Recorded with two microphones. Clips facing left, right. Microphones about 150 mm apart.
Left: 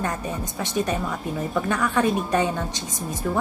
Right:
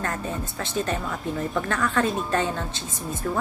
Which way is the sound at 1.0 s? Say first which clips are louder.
Even; 5° left (ahead or behind).